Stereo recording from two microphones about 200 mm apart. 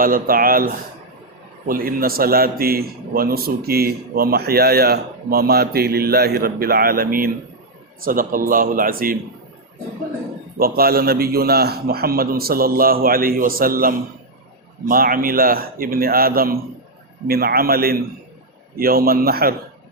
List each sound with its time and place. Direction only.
0.0 s a man's voice: 45° right (ahead or behind)
10.6 s a man's voice: 50° right (ahead or behind)